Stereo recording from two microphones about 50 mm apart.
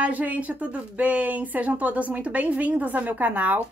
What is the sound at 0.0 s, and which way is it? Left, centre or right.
Speech, right.